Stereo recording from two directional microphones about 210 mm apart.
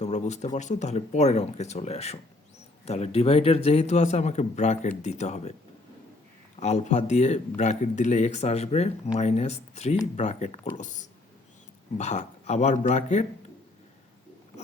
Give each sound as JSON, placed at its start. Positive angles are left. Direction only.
{"t": 0.0, "sound": "a man's voice", "side_deg": 30}
{"t": 6.6, "sound": "a man's voice", "side_deg": 30}